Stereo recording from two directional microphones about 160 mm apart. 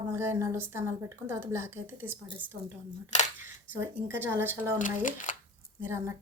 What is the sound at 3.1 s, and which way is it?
Speech, 45° left (ahead or behind).